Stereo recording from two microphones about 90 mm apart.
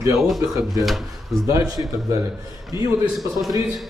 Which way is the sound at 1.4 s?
40° right (ahead or behind).